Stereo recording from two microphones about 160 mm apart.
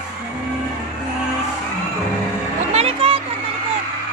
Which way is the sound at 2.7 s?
40° right (ahead or behind).